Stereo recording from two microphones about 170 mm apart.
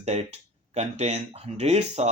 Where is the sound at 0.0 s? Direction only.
40° right (ahead or behind).